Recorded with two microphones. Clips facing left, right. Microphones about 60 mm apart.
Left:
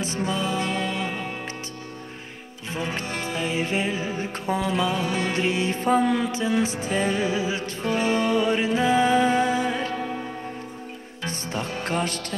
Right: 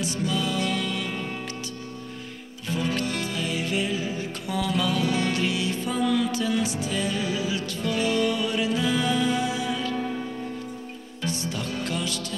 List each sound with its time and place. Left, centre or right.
0.0 s music: left
2.7 s music: left
11.2 s music: left